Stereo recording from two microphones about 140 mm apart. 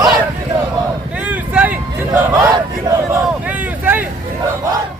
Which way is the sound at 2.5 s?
25° right (ahead or behind).